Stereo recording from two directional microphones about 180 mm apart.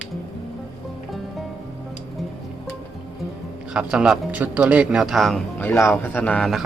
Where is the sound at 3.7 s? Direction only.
5° right (ahead or behind).